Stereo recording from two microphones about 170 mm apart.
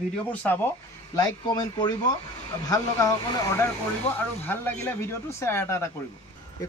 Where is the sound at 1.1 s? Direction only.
25° left (ahead or behind).